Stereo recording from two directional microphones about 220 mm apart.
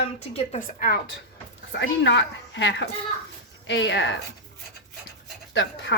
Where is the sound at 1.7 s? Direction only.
55° left (ahead or behind).